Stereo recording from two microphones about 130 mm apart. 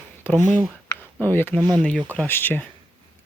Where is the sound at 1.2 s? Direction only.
15° left (ahead or behind).